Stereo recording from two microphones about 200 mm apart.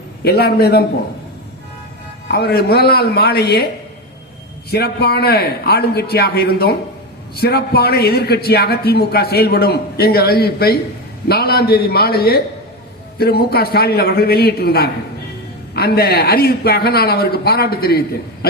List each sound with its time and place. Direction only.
0.3 s a man's voice: 55° left (ahead or behind)
2.2 s a man's voice: 55° left (ahead or behind)
4.7 s a man's voice: 50° left (ahead or behind)